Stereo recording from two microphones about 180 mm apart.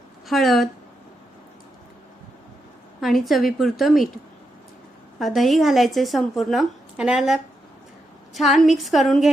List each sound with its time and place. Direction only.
0.3 s a woman's voice: centre (ahead or behind)
3.0 s a woman's voice: centre (ahead or behind)
5.2 s a woman's voice: centre (ahead or behind)